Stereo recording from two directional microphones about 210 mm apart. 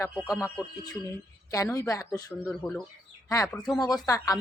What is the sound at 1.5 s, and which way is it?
Speech, 15° left (ahead or behind).